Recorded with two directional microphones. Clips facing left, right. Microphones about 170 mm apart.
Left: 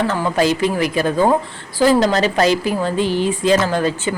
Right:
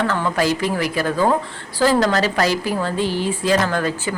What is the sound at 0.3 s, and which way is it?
A woman's voice, 20° left (ahead or behind).